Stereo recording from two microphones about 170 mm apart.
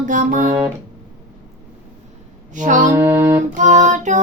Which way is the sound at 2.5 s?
50° right (ahead or behind).